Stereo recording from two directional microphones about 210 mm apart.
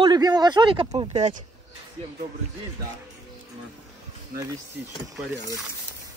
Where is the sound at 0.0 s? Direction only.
20° right (ahead or behind).